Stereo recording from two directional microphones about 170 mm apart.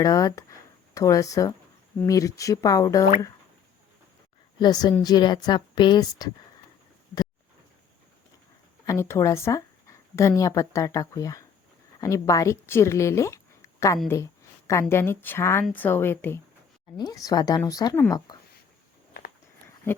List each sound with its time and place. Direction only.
0.0 s a woman's voice: 20° left (ahead or behind)
4.6 s a woman's voice: 25° left (ahead or behind)
8.9 s a woman's voice: 15° left (ahead or behind)
19.9 s a woman's voice: 15° left (ahead or behind)